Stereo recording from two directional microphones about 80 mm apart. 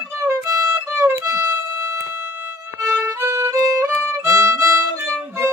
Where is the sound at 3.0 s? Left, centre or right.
Right.